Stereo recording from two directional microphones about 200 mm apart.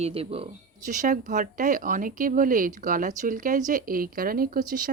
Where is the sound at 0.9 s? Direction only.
40° right (ahead or behind).